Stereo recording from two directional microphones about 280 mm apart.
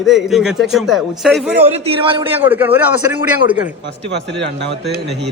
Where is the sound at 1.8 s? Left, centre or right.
Centre.